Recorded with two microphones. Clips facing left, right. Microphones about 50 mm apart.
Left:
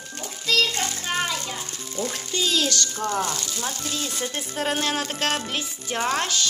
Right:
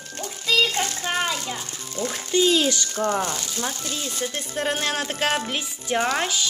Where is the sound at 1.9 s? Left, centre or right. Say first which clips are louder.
Right 5 dB; centre.